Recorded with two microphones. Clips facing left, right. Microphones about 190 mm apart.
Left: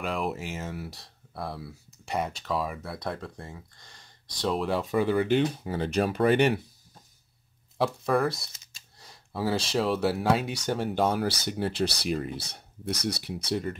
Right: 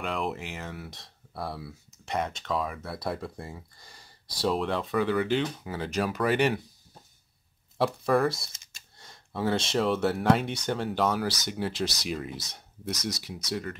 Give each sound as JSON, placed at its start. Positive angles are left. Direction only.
{"t": 0.0, "sound": "speech", "side_deg": 5}
{"t": 4.9, "sound": "speech", "side_deg": 25}
{"t": 7.7, "sound": "speech", "side_deg": 0}
{"t": 11.6, "sound": "speech", "side_deg": 60}
{"t": 12.2, "sound": "speech", "side_deg": 30}
{"t": 12.9, "sound": "speech", "side_deg": 60}
{"t": 13.4, "sound": "speech", "side_deg": 25}